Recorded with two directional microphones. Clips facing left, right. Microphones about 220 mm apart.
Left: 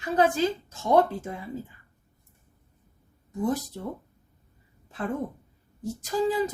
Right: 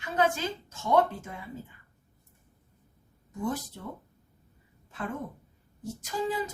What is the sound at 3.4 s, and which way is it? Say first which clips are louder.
Speech: left 5 dB; 40° left (ahead or behind).